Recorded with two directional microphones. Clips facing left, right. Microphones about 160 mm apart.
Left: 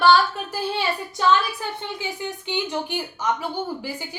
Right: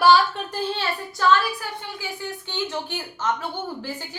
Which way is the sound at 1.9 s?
15° left (ahead or behind).